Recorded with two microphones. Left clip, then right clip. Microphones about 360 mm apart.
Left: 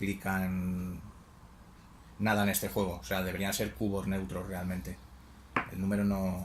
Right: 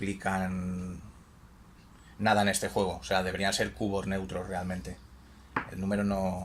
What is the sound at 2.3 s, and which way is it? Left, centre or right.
Speech, right.